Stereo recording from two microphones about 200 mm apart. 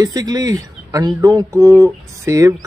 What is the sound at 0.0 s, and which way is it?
Speech, 20° right (ahead or behind).